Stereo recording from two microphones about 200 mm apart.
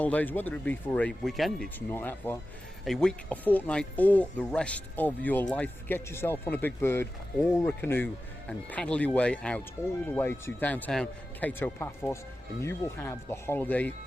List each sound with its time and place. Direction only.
0.0 s speech: 10° left (ahead or behind)